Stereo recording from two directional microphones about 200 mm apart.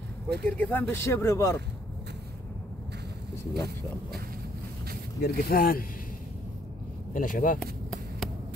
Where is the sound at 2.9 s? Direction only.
60° right (ahead or behind).